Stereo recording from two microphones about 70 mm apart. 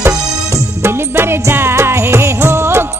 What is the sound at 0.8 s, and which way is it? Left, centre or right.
Music, right.